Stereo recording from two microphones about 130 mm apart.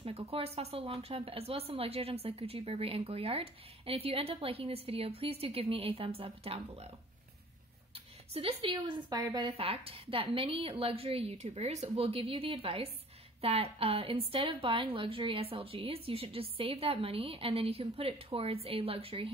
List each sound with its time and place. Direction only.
0.0 s speech: 50° right (ahead or behind)
8.3 s a woman's voice: 45° right (ahead or behind)
9.5 s speech: 50° right (ahead or behind)
11.9 s speech: 45° right (ahead or behind)